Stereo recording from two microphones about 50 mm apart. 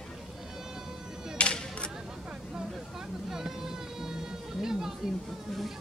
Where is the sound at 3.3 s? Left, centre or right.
Centre.